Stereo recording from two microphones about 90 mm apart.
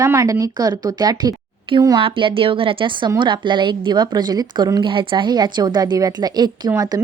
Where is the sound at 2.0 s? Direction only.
70° right (ahead or behind).